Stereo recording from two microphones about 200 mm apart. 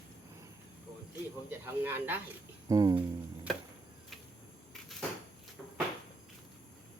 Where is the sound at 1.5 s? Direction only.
10° right (ahead or behind).